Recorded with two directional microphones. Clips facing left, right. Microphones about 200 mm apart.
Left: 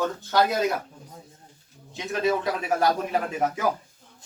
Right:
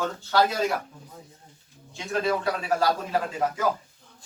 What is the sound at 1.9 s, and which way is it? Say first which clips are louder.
A man's voice: left 1 dB; 20° left (ahead or behind).